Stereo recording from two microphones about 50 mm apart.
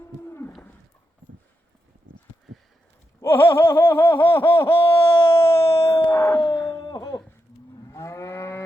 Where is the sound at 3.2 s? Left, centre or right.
Left.